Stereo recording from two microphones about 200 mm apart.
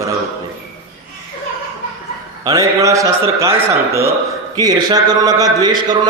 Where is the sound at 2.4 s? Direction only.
15° right (ahead or behind).